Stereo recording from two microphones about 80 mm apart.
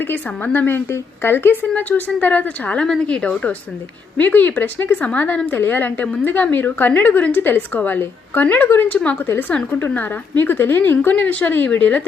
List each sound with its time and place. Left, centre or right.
0.0 s a woman's voice: left
9.2 s a woman's voice: left